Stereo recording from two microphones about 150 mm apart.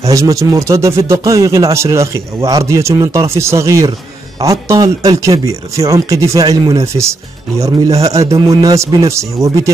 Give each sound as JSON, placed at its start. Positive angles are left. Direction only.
{"t": 0.0, "sound": "speech", "side_deg": -20}